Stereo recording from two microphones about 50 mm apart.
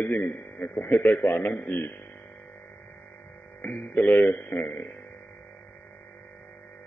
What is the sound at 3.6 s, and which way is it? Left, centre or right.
A man's voice, left.